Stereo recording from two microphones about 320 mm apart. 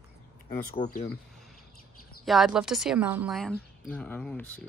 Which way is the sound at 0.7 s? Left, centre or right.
Left.